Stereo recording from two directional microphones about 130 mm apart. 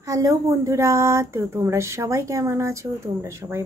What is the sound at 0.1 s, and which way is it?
Speech, 25° right (ahead or behind).